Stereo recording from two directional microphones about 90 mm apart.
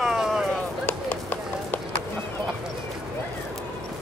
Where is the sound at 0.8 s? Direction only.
20° left (ahead or behind).